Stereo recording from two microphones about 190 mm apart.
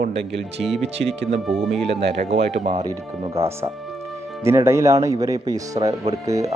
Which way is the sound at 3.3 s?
15° right (ahead or behind).